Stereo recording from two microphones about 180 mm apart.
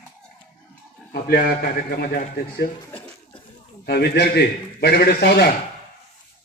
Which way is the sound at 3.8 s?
65° left (ahead or behind).